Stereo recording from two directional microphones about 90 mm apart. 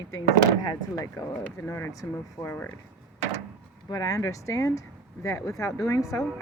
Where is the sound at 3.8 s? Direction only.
45° left (ahead or behind).